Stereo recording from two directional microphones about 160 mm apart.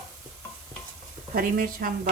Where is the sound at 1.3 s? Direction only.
60° right (ahead or behind).